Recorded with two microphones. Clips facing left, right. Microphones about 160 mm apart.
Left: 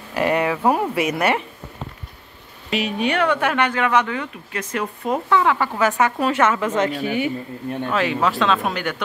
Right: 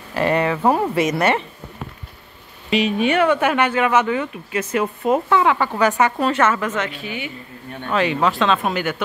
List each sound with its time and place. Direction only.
0.1 s speech: 15° left (ahead or behind)
2.7 s speech: centre (ahead or behind)
6.7 s a woman's voice: 40° left (ahead or behind)
7.9 s speech: centre (ahead or behind)